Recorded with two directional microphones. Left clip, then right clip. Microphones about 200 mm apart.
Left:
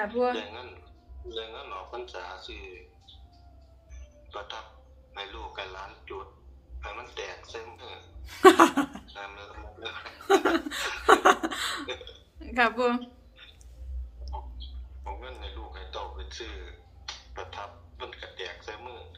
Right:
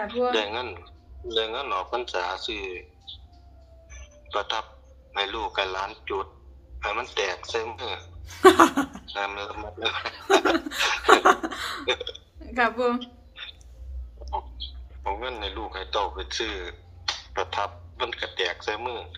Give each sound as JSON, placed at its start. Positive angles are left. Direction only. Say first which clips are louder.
{"t": 0.3, "sound": "speech", "louder": "right 11 dB", "side_deg": -55}
{"t": 3.1, "sound": "music", "louder": "right 10 dB", "side_deg": -55}
{"t": 5.1, "sound": "speech", "louder": "right 12 dB", "side_deg": -55}
{"t": 8.3, "sound": "chuckle", "louder": "right 2 dB", "side_deg": 0}
{"t": 9.1, "sound": "speech", "louder": "right 12 dB", "side_deg": -55}
{"t": 10.2, "sound": "laughter", "louder": "right 2 dB", "side_deg": -10}
{"t": 11.0, "sound": "chuckle", "louder": "right 2 dB", "side_deg": -5}
{"t": 12.4, "sound": "a woman's voice", "louder": "right 1 dB", "side_deg": 0}
{"t": 13.0, "sound": "a sound", "louder": "right 6 dB", "side_deg": -55}
{"t": 14.3, "sound": "a man's voice", "louder": "right 11 dB", "side_deg": -55}